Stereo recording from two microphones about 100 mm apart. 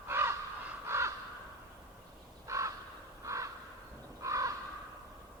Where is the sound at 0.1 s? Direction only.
25° right (ahead or behind).